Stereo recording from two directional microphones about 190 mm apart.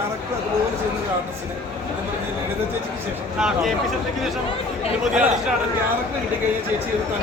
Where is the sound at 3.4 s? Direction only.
5° right (ahead or behind).